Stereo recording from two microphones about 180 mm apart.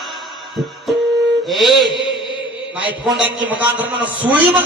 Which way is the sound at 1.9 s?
25° left (ahead or behind).